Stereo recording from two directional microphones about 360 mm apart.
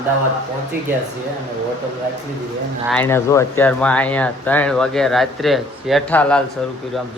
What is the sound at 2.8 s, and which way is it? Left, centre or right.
Speech, centre.